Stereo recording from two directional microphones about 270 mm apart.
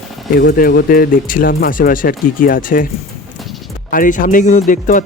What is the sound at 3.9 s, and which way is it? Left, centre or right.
A man's voice, left.